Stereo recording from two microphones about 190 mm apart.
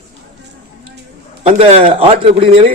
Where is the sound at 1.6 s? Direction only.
35° right (ahead or behind).